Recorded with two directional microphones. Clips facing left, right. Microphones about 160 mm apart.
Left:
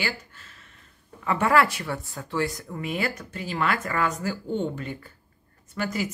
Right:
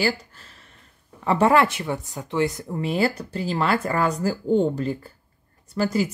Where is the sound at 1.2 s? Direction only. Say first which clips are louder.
Right 4 dB; 30° right (ahead or behind).